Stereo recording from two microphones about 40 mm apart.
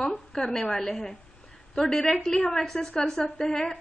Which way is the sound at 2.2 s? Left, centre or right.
Centre.